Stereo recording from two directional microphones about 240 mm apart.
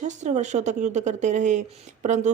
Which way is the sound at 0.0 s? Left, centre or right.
Right.